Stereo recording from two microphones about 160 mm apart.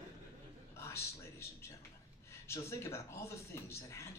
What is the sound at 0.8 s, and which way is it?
Speech, 15° left (ahead or behind).